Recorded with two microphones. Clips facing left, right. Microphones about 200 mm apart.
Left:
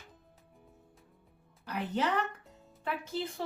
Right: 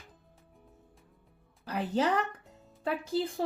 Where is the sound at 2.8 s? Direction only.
35° right (ahead or behind).